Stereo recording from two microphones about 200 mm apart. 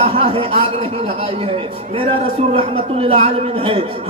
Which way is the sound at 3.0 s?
30° right (ahead or behind).